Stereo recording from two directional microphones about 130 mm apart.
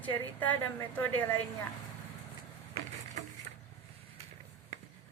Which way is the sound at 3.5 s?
90° right.